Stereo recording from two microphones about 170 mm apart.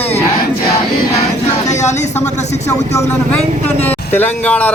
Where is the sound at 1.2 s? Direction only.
40° left (ahead or behind).